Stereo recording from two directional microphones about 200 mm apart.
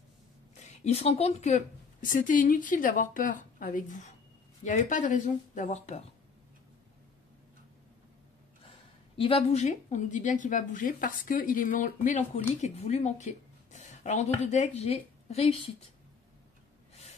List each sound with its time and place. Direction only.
0.6 s speech: 35° left (ahead or behind)
9.1 s a woman's voice: 25° left (ahead or behind)